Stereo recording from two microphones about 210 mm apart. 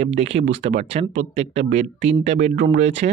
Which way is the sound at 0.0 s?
30° right (ahead or behind).